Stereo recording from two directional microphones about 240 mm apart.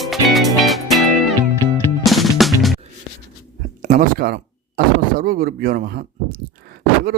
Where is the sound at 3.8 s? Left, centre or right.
Right.